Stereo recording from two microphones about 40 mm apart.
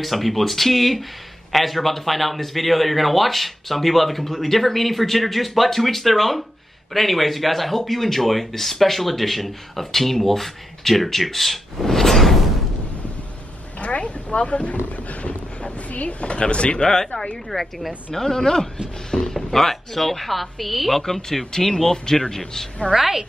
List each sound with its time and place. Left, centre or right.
0.0 s speech: centre
13.7 s speech: left
17.5 s speech: centre
18.1 s a man's voice: centre
21.0 s a man's voice: centre
22.9 s a woman's voice: centre